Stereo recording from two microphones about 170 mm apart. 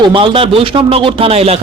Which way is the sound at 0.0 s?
30° right (ahead or behind).